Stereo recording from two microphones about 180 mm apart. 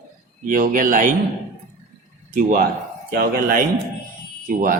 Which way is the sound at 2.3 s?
55° right (ahead or behind).